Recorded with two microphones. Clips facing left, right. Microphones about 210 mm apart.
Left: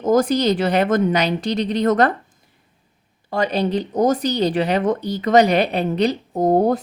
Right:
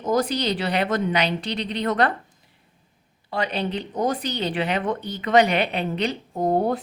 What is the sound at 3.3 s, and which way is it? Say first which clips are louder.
Speech: left 6 dB; 40° left (ahead or behind).